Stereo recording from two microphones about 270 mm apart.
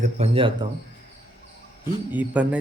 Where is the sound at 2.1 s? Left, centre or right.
Centre.